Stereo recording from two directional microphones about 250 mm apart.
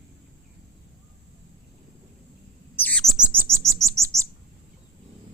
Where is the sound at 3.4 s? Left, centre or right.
Centre.